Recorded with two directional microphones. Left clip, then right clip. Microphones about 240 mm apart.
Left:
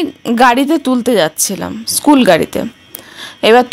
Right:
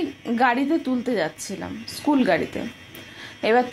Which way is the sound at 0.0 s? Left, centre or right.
Left.